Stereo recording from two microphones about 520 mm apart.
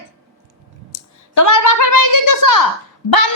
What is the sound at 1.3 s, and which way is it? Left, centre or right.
A woman's voice, left.